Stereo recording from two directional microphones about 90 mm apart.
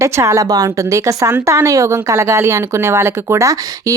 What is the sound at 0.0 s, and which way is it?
A woman's voice, 35° right (ahead or behind).